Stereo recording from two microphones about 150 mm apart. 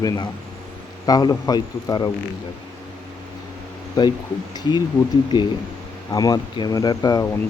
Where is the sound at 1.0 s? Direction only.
25° left (ahead or behind).